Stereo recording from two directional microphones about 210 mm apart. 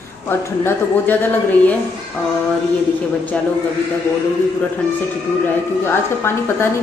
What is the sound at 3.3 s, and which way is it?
Speech, 5° left (ahead or behind).